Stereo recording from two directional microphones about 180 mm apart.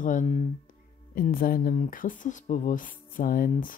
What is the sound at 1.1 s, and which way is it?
Speech, 50° left (ahead or behind).